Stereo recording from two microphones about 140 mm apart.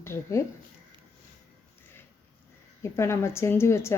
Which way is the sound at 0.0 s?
20° left (ahead or behind).